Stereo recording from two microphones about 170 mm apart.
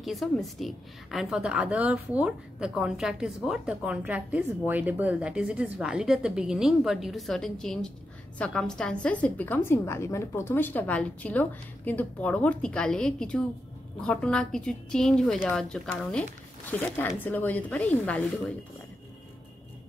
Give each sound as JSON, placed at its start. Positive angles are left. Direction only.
{"t": 0.0, "sound": "a woman's voice", "side_deg": 0}